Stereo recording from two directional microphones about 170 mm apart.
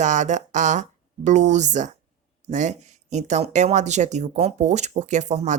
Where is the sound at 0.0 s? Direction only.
45° right (ahead or behind).